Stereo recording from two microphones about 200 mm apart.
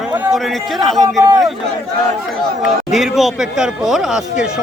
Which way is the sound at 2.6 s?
Centre (ahead or behind).